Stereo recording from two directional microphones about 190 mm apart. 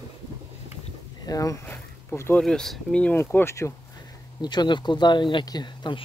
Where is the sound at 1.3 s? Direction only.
15° left (ahead or behind).